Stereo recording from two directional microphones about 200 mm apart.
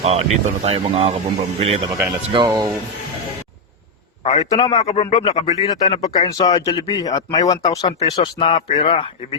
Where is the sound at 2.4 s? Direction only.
20° right (ahead or behind).